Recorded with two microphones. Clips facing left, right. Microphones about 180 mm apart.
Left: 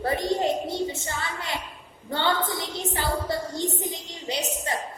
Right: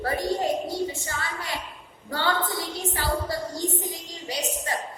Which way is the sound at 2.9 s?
25° left (ahead or behind).